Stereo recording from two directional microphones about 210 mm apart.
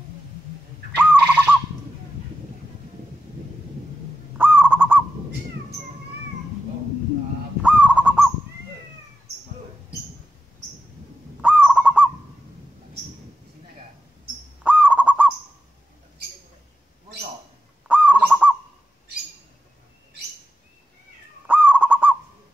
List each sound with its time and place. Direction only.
0.9 s bird: 10° right (ahead or behind)
4.4 s honk: 10° right (ahead or behind)
7.6 s honk: 5° right (ahead or behind)
11.4 s honk: 5° right (ahead or behind)
14.6 s owl: 5° right (ahead or behind)
17.8 s goose: 5° right (ahead or behind)
21.5 s owl: 5° right (ahead or behind)